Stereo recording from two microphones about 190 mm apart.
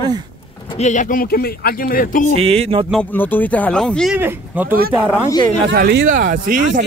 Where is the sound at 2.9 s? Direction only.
5° left (ahead or behind).